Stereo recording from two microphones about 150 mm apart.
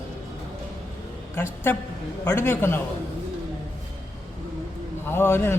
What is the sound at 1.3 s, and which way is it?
A woman's voice, 15° left (ahead or behind).